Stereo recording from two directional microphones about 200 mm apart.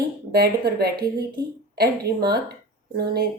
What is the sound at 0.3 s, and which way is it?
Speech, 50° right (ahead or behind).